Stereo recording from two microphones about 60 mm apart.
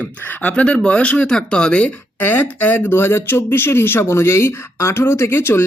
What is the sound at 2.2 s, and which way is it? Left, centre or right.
Speech, left.